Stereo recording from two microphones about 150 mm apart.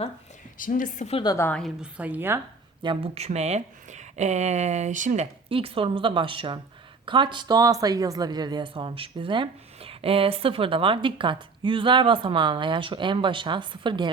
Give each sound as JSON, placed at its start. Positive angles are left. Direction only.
{"t": 0.6, "sound": "a woman's voice", "side_deg": 65}
{"t": 1.2, "sound": "a woman's voice", "side_deg": 25}
{"t": 1.5, "sound": "a woman's voice", "side_deg": 5}
{"t": 1.8, "sound": "a woman's voice", "side_deg": -10}
{"t": 2.8, "sound": "a woman's voice", "side_deg": -35}